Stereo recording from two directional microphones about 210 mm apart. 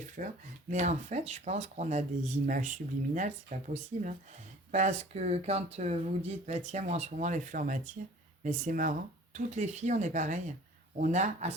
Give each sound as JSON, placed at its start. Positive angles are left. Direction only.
{"t": 0.2, "sound": "speech", "side_deg": -40}